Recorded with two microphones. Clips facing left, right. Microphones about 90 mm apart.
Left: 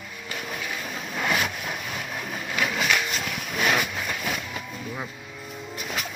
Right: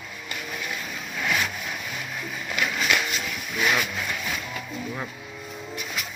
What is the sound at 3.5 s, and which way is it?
Vehicle, 35° left (ahead or behind).